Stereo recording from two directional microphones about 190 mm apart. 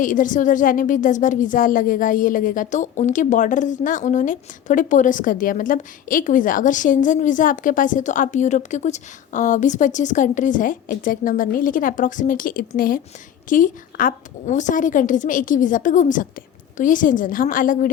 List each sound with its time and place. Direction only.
0.0 s a woman's voice: 45° left (ahead or behind)